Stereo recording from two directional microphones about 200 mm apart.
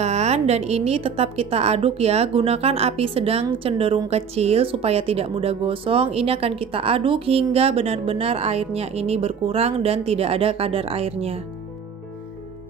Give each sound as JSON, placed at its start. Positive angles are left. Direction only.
{"t": 0.0, "sound": "a woman's voice", "side_deg": -35}